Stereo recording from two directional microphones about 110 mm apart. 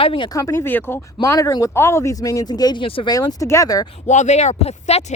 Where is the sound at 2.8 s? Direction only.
55° left (ahead or behind).